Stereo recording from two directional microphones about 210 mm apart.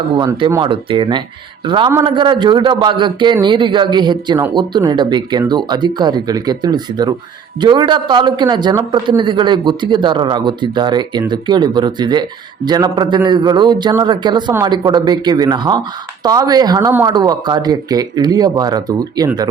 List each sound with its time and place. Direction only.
0.2 s a man's voice: 20° right (ahead or behind)